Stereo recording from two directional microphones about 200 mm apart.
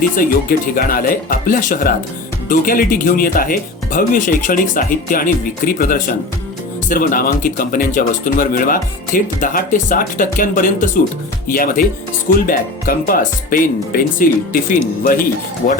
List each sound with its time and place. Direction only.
0.2 s speech: 45° left (ahead or behind)